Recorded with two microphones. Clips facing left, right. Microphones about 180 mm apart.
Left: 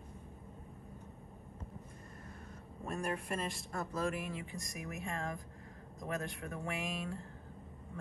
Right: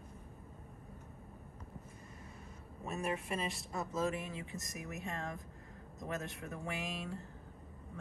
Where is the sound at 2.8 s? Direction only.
5° right (ahead or behind).